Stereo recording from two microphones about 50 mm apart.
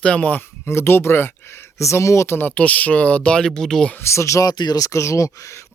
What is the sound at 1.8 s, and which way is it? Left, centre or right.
Speech, left.